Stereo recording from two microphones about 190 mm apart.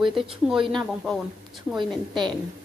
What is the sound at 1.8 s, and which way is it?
Speech, 25° right (ahead or behind).